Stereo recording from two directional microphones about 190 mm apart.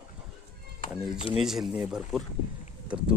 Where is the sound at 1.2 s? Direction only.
30° left (ahead or behind).